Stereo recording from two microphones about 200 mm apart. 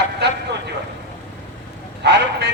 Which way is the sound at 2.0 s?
55° right (ahead or behind).